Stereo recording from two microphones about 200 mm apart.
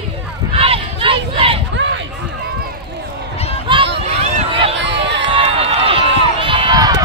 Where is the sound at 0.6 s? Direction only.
25° right (ahead or behind).